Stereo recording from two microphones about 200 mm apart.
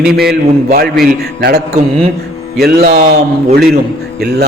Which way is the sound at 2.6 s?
50° right (ahead or behind).